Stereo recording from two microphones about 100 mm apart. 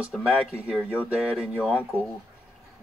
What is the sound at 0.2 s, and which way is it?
Speech, 10° right (ahead or behind).